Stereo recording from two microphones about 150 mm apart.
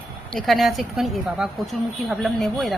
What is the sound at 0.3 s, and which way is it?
A woman's voice, centre (ahead or behind).